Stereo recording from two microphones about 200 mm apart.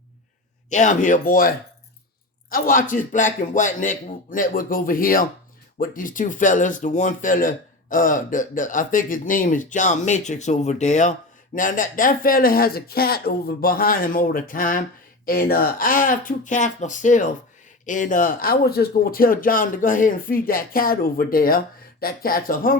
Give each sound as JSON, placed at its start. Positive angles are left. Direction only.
{"t": 0.7, "sound": "speech", "side_deg": 35}